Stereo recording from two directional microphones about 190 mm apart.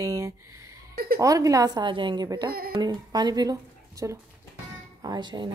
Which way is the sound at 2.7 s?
20° right (ahead or behind).